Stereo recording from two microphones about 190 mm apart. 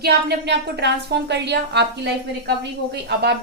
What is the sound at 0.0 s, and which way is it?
A woman's voice, 60° right (ahead or behind).